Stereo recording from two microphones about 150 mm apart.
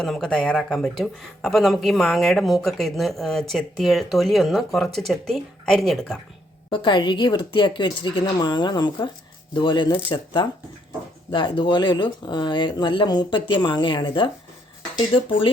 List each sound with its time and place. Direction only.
0.0 s speech: 5° left (ahead or behind)
6.7 s speech: 30° left (ahead or behind)